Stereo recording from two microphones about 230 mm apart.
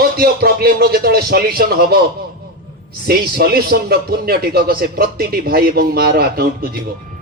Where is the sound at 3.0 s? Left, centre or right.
Right.